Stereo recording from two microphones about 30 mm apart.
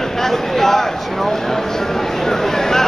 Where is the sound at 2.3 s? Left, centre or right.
Centre.